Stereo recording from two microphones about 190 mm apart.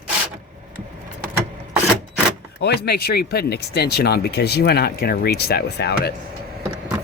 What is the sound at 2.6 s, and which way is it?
Speech, 60° left (ahead or behind).